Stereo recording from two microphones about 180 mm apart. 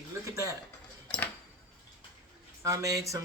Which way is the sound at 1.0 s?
5° left (ahead or behind).